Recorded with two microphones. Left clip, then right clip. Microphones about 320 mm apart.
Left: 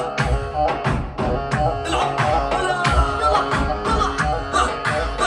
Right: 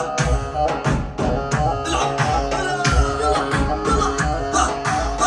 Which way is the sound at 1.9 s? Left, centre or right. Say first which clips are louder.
Left 2 dB; centre.